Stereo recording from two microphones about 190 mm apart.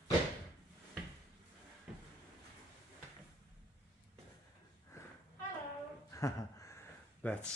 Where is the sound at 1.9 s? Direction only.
5° right (ahead or behind).